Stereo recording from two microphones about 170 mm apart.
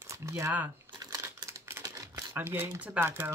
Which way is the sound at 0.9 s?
20° right (ahead or behind).